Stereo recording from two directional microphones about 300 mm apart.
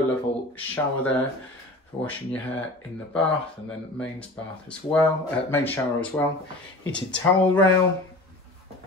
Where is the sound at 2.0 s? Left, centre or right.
Centre.